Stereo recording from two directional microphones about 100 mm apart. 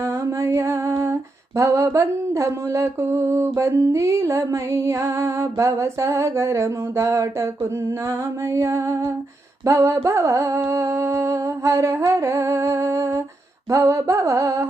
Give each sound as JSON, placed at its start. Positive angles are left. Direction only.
{"t": 0.0, "sound": "music", "side_deg": -25}
{"t": 1.5, "sound": "mantra", "side_deg": -30}
{"t": 9.6, "sound": "music", "side_deg": -30}